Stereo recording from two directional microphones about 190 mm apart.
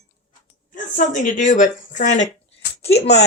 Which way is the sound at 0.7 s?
45° left (ahead or behind).